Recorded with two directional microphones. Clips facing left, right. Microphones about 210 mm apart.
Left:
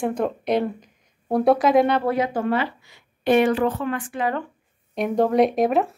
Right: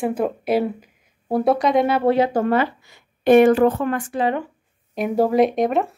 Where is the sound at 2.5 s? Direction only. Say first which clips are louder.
Right 4 dB; 45° right (ahead or behind).